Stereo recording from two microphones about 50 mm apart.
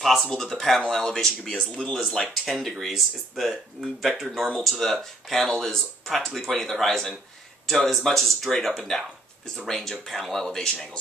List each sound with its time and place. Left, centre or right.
0.0 s speech: centre; by 2.0 s left
2.1 s speech: centre